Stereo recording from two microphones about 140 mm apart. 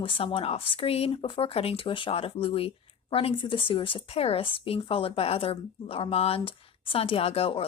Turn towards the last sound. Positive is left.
turn(degrees=45)  # may be behind; listen again after turning